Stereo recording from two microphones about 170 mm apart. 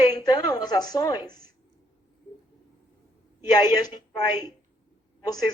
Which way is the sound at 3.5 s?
25° left (ahead or behind).